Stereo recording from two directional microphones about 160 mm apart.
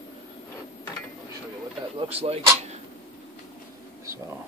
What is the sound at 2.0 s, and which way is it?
Speech, 40° right (ahead or behind).